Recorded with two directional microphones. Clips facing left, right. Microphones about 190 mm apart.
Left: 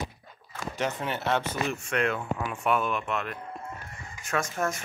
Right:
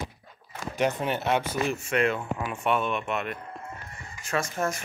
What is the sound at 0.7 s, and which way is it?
Speech, 15° right (ahead or behind).